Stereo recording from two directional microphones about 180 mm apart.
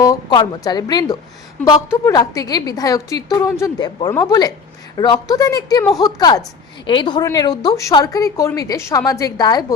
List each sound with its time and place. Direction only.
0.0 s a woman's voice: 20° left (ahead or behind)